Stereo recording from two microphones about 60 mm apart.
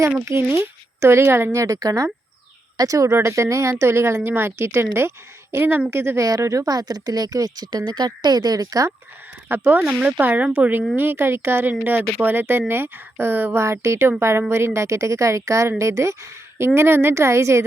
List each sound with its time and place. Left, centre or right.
0.5 s speech: right
1.5 s a woman's voice: right
3.2 s speech: right
6.2 s speech: right
9.5 s speech: right
10.2 s speech: right
11.7 s speech: right
13.6 s a woman's voice: right
16.6 s speech: right